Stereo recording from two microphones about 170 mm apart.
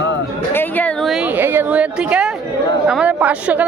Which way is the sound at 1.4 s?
10° right (ahead or behind).